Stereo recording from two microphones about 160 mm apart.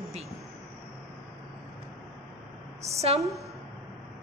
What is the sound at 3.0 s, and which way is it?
Speech, 40° right (ahead or behind).